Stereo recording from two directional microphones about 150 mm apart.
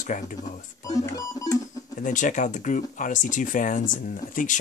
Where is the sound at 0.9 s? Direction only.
25° left (ahead or behind).